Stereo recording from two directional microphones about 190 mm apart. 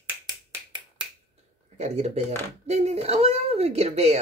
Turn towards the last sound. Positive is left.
turn(degrees=-35)  # may be behind; listen again after turning